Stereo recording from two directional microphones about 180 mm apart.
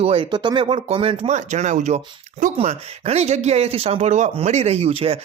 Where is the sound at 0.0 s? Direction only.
30° right (ahead or behind).